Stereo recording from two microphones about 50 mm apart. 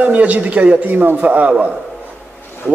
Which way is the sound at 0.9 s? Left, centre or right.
Right.